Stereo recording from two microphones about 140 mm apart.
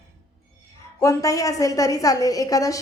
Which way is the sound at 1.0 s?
25° left (ahead or behind).